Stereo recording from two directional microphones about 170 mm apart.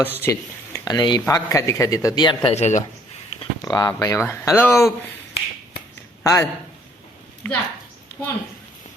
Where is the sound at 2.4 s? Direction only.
40° left (ahead or behind).